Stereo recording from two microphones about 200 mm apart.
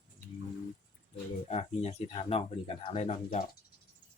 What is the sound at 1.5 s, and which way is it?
Speech, 30° left (ahead or behind).